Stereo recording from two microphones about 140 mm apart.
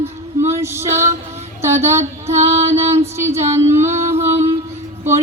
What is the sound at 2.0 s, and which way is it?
Female singing, 50° right (ahead or behind).